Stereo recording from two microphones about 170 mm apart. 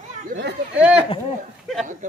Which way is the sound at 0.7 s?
5° right (ahead or behind).